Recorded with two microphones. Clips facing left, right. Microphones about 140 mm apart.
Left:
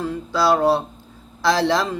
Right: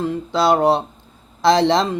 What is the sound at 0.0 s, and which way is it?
Speech, 20° right (ahead or behind).